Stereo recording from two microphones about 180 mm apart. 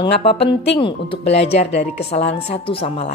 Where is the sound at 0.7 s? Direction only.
30° left (ahead or behind).